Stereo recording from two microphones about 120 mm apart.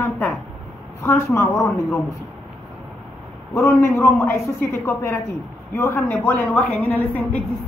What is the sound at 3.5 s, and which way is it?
A woman's voice, 20° left (ahead or behind).